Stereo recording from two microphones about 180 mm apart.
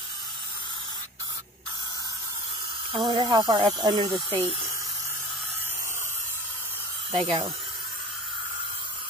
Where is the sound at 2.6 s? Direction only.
25° right (ahead or behind).